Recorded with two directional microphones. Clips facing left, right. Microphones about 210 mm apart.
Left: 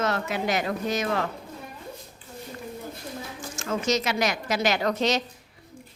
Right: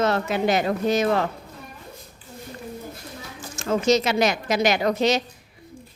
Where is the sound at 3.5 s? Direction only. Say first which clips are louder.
Right 6 dB; 30° right (ahead or behind); by 5.2 s 10° right (ahead or behind).